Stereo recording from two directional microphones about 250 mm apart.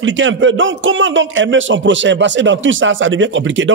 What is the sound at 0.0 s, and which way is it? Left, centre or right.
A man's voice, right.